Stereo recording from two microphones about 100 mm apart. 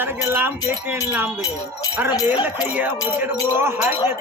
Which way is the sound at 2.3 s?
15° right (ahead or behind).